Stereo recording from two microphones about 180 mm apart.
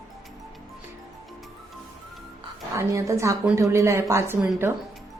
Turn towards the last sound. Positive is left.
turn(degrees=-15)  # may be behind; listen again after turning